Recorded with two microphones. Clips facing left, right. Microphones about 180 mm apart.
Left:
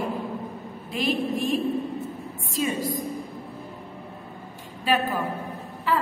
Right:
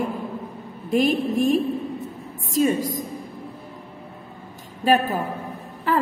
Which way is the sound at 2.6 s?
45° right (ahead or behind).